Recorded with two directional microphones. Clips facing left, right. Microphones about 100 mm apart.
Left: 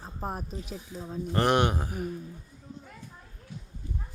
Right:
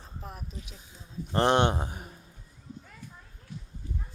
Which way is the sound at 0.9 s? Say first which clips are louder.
Left 14 dB; 90° left.